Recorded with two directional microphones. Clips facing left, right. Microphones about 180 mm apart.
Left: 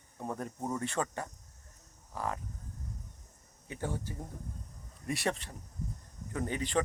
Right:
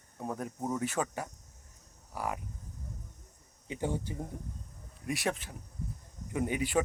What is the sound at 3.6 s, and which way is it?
Speech, 15° right (ahead or behind).